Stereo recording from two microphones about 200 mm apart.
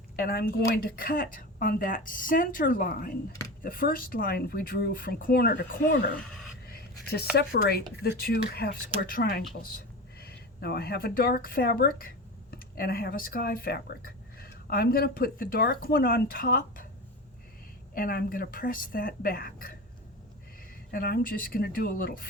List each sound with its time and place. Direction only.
0.2 s speech: 50° left (ahead or behind)
6.7 s a sound: 50° left (ahead or behind)
7.3 s a woman's voice: 50° left (ahead or behind)
17.9 s speech: 45° left (ahead or behind)
20.9 s speech: 45° left (ahead or behind)